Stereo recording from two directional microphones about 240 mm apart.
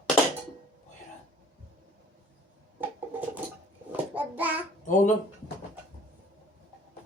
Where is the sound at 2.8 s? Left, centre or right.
Centre.